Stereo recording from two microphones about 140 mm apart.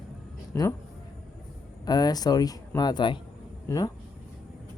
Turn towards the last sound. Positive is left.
turn(degrees=25)  # may be behind; listen again after turning